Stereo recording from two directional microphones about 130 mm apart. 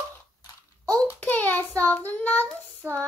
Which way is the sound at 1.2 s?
15° left (ahead or behind).